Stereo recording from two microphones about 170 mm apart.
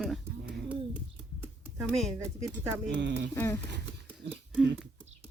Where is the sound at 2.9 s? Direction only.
90° right.